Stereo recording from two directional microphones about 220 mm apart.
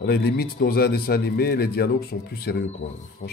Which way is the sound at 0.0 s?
45° left (ahead or behind).